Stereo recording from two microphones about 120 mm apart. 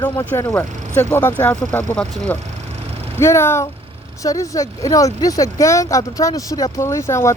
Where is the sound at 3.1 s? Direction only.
20° left (ahead or behind).